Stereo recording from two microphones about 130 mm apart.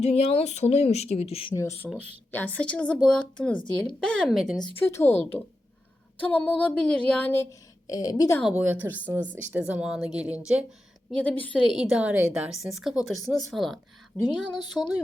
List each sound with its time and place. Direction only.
0.0 s speech: 50° left (ahead or behind)
1.5 s a woman's voice: 25° left (ahead or behind)
2.3 s a woman's voice: 10° left (ahead or behind)
4.7 s a woman's voice: 20° left (ahead or behind)
7.9 s a woman's voice: 30° left (ahead or behind)
8.5 s speech: 15° right (ahead or behind)
11.1 s a woman's voice: 10° left (ahead or behind)
11.7 s a woman's voice: 5° right (ahead or behind)